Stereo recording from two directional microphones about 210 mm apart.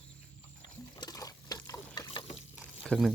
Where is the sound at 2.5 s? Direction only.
5° right (ahead or behind).